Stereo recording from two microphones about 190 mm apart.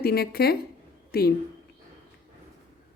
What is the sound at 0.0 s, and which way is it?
A woman's voice, 55° left (ahead or behind).